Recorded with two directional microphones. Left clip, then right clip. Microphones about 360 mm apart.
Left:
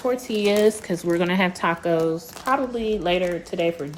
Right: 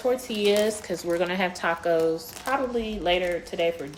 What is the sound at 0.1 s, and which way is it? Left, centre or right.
Speech, centre.